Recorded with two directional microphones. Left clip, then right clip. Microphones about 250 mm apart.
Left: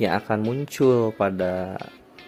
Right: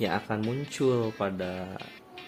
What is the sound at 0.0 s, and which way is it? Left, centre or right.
Speech, left.